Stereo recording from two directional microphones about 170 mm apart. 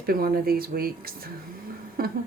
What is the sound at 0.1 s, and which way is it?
Speech, 60° right (ahead or behind).